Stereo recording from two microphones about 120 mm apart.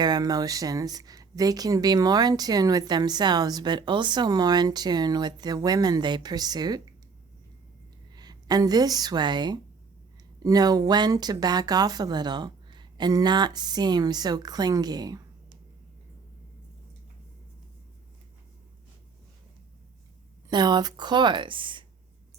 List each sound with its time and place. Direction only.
0.0 s speech: 35° right (ahead or behind)
8.1 s a woman's voice: 35° right (ahead or behind)
20.5 s speech: 35° right (ahead or behind)